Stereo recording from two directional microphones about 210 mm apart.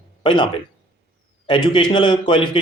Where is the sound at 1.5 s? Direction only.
20° left (ahead or behind).